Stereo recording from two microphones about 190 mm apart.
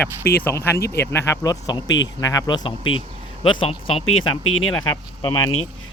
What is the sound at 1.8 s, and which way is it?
Speech, 75° left (ahead or behind).